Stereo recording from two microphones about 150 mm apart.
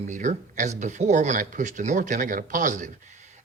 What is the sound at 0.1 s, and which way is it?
Speech, 55° right (ahead or behind).